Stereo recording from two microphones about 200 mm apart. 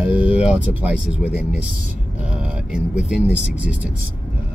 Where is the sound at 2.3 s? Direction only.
5° right (ahead or behind).